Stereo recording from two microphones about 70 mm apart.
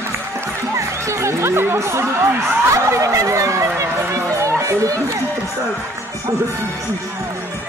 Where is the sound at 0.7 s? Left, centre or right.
Right.